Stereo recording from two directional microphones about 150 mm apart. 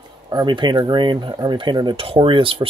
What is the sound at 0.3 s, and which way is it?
Speech, 30° right (ahead or behind).